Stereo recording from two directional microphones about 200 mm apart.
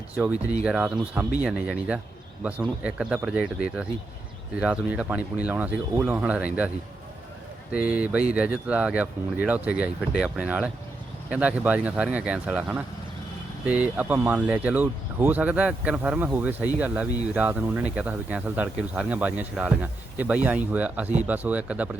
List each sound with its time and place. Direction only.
0.1 s speech: 5° right (ahead or behind)
7.7 s speech: 5° right (ahead or behind)